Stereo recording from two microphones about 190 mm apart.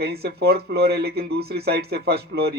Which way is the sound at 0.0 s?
60° right (ahead or behind).